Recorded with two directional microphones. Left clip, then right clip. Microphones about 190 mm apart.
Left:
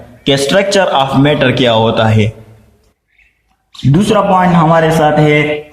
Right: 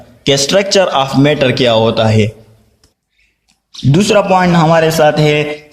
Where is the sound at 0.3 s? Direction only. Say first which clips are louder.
Left 1 dB; 35° right (ahead or behind).